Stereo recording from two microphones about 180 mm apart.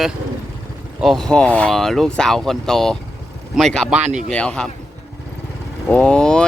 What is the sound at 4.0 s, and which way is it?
Speech, 40° right (ahead or behind).